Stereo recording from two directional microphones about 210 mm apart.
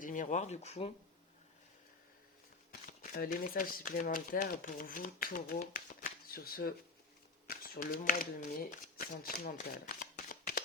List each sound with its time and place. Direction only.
0.0 s speech: 35° left (ahead or behind)
3.0 s speech: 40° left (ahead or behind)
10.0 s shuffling cards: 40° left (ahead or behind)